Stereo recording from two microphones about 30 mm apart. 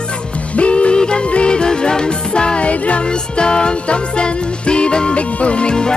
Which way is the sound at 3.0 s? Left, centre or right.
Left.